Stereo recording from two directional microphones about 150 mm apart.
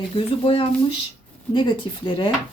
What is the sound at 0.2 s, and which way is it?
Speech, 35° left (ahead or behind).